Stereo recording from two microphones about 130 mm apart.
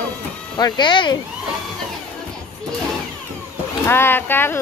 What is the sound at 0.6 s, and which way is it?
Speech, 35° left (ahead or behind).